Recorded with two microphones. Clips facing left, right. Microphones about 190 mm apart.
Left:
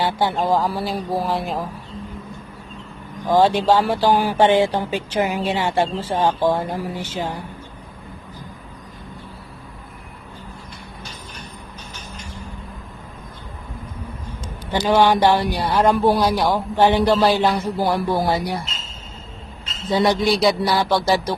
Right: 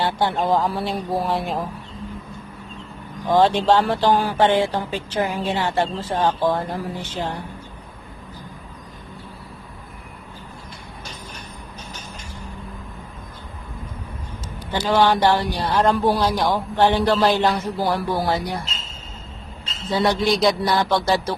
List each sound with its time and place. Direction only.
0.0 s speech: centre (ahead or behind)
3.4 s speech: 10° left (ahead or behind)
14.8 s speech: 15° left (ahead or behind)
19.9 s speech: 15° left (ahead or behind)
20.2 s speech: 5° left (ahead or behind)